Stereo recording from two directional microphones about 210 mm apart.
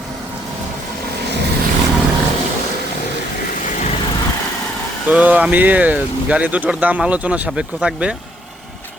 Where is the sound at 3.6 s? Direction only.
35° left (ahead or behind).